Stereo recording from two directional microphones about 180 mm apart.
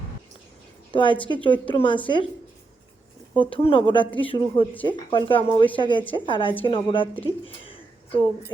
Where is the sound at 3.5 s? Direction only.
30° left (ahead or behind).